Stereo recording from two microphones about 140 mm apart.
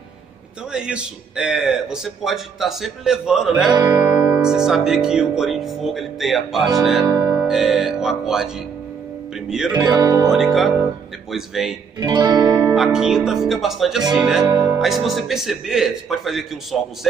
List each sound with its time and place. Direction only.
0.7 s a man's voice: 5° right (ahead or behind)
3.7 s music: 25° right (ahead or behind)
4.2 s a man's voice: 10° right (ahead or behind)
7.1 s music: 30° right (ahead or behind)
7.3 s a man's voice: 5° right (ahead or behind)
9.5 s a man's voice: 5° right (ahead or behind)
9.8 s speech: 20° right (ahead or behind)
10.3 s a man's voice: centre (ahead or behind)
12.0 s music: 30° right (ahead or behind)
12.7 s a man's voice: 5° right (ahead or behind)
14.4 s speech: 20° right (ahead or behind)
14.8 s a man's voice: centre (ahead or behind)